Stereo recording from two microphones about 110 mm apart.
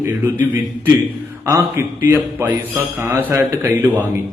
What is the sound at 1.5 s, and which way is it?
A man's voice, 25° right (ahead or behind).